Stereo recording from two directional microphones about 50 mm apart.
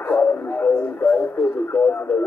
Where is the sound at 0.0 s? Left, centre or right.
Left.